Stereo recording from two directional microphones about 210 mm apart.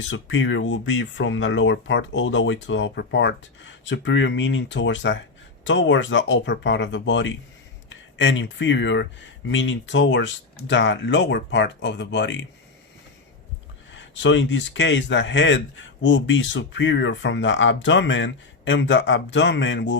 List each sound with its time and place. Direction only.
0.1 s speech: 65° left (ahead or behind)
13.9 s speech: 60° left (ahead or behind)